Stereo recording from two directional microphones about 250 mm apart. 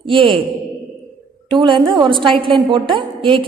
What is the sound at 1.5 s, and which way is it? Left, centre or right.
A woman's voice, centre.